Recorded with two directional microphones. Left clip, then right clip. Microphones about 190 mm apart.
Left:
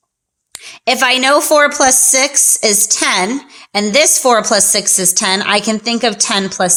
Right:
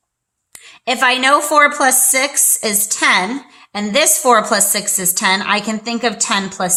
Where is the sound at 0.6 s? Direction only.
40° left (ahead or behind).